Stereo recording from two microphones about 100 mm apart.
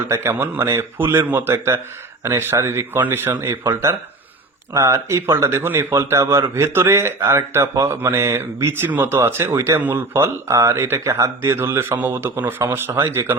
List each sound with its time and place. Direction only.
0.1 s speech: 25° right (ahead or behind)